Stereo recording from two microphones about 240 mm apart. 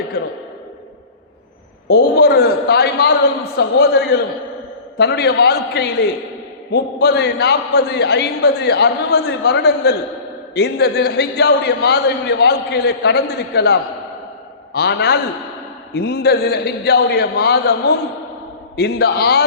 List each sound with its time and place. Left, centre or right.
1.9 s a man's voice: left